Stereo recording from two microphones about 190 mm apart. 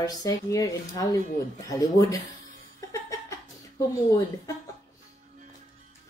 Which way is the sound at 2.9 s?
15° left (ahead or behind).